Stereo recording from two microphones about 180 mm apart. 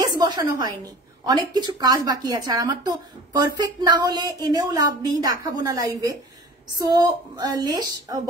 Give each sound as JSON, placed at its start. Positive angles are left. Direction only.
{"t": 0.0, "sound": "a woman's voice", "side_deg": -20}